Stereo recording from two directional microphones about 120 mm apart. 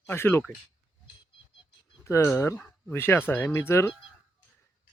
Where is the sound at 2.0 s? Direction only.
20° left (ahead or behind).